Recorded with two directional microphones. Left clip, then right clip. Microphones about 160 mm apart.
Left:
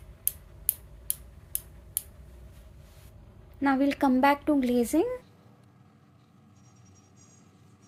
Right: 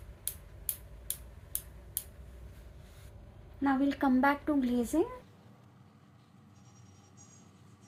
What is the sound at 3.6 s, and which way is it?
Speech, 90° left.